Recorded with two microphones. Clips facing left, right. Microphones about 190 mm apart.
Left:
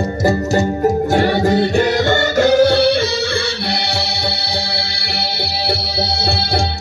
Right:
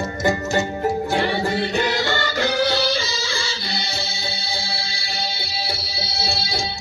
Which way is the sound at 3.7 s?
75° left (ahead or behind).